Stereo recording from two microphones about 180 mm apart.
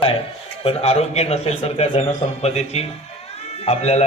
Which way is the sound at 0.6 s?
35° left (ahead or behind).